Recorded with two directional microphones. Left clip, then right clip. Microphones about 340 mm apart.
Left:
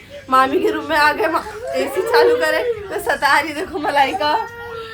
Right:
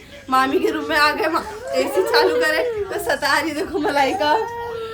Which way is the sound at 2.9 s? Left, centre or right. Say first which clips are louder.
Left 5 dB; centre.